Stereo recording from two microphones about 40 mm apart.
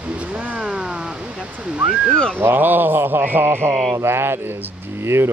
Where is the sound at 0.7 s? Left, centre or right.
Centre.